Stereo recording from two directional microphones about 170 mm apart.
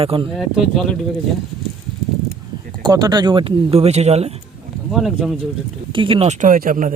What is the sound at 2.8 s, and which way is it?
Speech, 25° right (ahead or behind).